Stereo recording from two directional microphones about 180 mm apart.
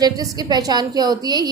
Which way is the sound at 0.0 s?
20° right (ahead or behind).